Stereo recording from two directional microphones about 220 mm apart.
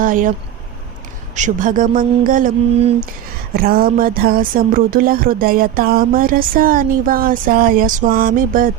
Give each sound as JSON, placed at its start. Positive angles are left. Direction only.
{"t": 0.0, "sound": "speech", "side_deg": -35}
{"t": 1.4, "sound": "speech", "side_deg": -35}